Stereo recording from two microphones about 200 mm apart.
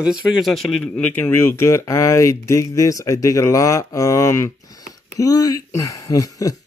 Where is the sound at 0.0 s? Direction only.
5° right (ahead or behind).